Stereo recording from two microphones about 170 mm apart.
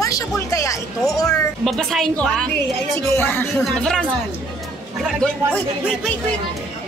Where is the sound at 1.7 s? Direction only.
Centre (ahead or behind).